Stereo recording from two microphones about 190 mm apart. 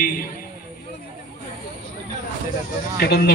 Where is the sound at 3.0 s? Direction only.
60° left (ahead or behind).